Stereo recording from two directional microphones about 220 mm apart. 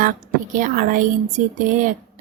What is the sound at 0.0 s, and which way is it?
Speech, 40° right (ahead or behind).